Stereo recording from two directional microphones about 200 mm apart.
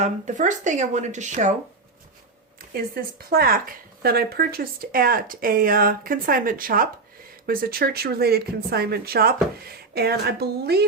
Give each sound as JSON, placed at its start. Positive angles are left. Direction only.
{"t": 0.0, "sound": "speech", "side_deg": -35}
{"t": 2.7, "sound": "speech", "side_deg": -50}